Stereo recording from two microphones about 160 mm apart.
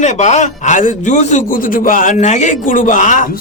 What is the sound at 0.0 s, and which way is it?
Speech, 45° left (ahead or behind).